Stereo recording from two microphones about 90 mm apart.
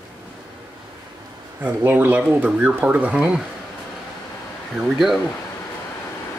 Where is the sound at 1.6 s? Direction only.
20° right (ahead or behind).